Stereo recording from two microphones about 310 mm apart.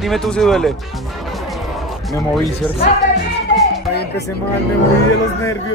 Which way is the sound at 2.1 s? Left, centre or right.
Centre.